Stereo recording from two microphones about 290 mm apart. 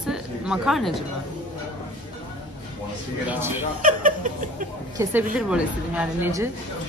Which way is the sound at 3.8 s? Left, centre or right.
Right.